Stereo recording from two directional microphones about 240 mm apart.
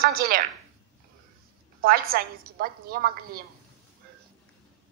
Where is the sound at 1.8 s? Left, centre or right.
Right.